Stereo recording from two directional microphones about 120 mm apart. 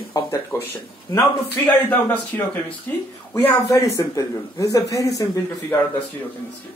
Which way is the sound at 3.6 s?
30° left (ahead or behind).